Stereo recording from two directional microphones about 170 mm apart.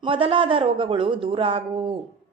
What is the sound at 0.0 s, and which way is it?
A man's voice, 30° right (ahead or behind).